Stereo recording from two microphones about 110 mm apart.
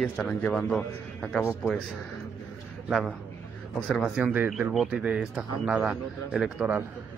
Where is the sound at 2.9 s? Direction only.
Centre (ahead or behind).